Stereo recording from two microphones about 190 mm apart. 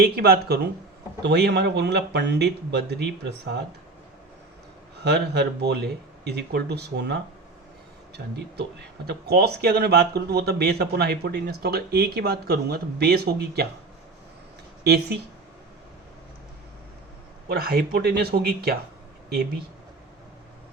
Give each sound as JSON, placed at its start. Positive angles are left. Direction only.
{"t": 0.0, "sound": "speech", "side_deg": -55}
{"t": 5.0, "sound": "speech", "side_deg": -60}
{"t": 9.0, "sound": "speech", "side_deg": -55}
{"t": 14.8, "sound": "speech", "side_deg": -60}
{"t": 17.5, "sound": "speech", "side_deg": -55}